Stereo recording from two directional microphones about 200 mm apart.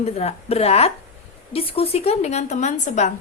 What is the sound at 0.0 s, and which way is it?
A woman's voice, 30° left (ahead or behind).